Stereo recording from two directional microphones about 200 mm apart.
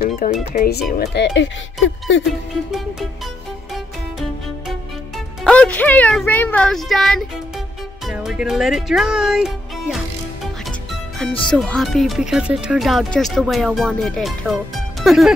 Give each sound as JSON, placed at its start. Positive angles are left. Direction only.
{"t": 0.2, "sound": "speech", "side_deg": 45}
{"t": 3.7, "sound": "music", "side_deg": 0}
{"t": 11.1, "sound": "speech", "side_deg": 5}